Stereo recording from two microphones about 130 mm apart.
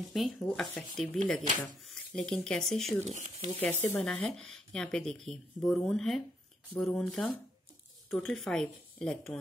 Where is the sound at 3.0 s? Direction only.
65° right (ahead or behind).